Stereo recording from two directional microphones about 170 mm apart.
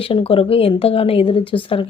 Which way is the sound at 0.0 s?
35° left (ahead or behind).